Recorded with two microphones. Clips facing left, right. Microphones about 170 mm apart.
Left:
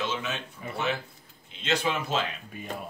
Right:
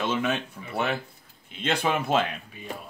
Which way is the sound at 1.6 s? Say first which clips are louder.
Right 2 dB; 55° right (ahead or behind).